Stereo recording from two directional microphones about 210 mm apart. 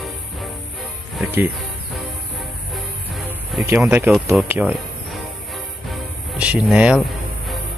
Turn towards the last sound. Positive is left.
turn(degrees=-5)  # may be behind; listen again after turning